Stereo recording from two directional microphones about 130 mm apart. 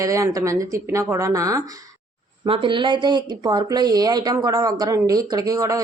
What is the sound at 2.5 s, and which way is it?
Speech, 40° right (ahead or behind).